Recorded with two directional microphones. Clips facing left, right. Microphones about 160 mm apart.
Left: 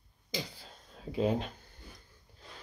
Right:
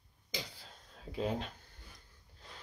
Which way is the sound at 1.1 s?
5° left (ahead or behind).